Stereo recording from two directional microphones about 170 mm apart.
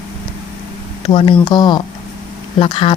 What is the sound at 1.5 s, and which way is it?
Speech, 25° left (ahead or behind).